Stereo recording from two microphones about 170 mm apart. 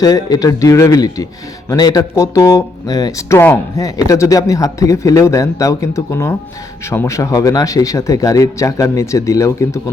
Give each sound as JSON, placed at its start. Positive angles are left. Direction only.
{"t": 0.0, "sound": "speech", "side_deg": 20}